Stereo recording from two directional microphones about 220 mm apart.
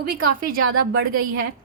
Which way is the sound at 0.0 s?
40° right (ahead or behind).